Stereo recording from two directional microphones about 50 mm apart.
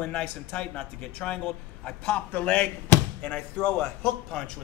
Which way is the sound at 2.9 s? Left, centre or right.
Left.